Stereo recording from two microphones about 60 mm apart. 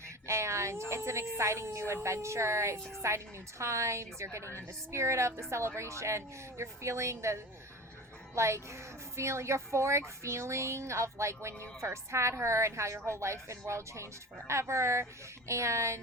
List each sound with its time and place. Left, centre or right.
0.3 s a woman's voice: right